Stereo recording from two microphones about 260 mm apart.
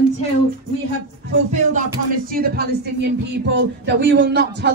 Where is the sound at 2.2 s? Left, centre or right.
Right.